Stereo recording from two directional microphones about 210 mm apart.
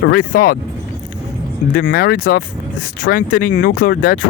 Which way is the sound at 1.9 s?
45° left (ahead or behind).